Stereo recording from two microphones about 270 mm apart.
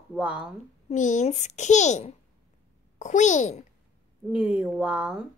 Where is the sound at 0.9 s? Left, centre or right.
Left.